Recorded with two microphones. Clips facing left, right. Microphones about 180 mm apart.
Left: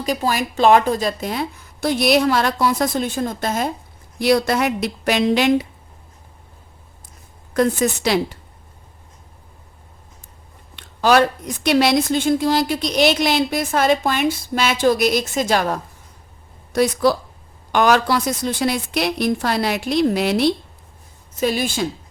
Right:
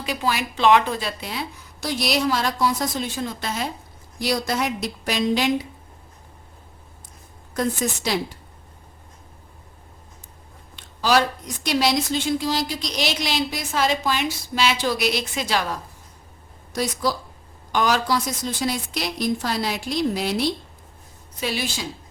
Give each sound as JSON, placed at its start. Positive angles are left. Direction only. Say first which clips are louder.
{"t": 0.0, "sound": "a woman's voice", "louder": "left 4 dB", "side_deg": 40}
{"t": 4.2, "sound": "a woman's voice", "louder": "left 7 dB", "side_deg": 65}
{"t": 7.5, "sound": "a woman's voice", "louder": "left 6 dB", "side_deg": 65}
{"t": 10.8, "sound": "a woman's voice", "louder": "left 5 dB", "side_deg": 60}
{"t": 16.7, "sound": "a woman's voice", "louder": "left 8 dB", "side_deg": 60}
{"t": 21.3, "sound": "a woman's voice", "louder": "left 7 dB", "side_deg": 45}